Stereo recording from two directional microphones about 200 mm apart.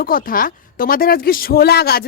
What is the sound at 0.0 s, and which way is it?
A woman's voice, 45° left (ahead or behind).